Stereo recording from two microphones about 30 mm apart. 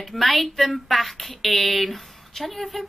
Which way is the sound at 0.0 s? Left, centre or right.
Centre.